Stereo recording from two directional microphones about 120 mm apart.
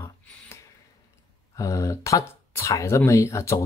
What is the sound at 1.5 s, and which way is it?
Speech, 25° left (ahead or behind).